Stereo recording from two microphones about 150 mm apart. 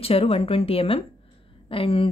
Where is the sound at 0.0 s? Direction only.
40° left (ahead or behind).